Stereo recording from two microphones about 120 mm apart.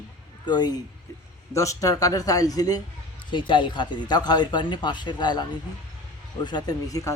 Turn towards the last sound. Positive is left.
turn(degrees=30)  # may be behind; listen again after turning